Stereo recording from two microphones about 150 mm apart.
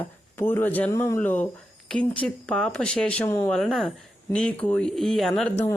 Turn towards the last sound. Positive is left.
turn(degrees=0)  # may be behind; listen again after turning